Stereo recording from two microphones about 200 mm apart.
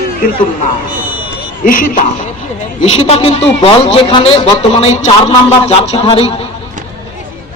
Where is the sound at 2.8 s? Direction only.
30° left (ahead or behind).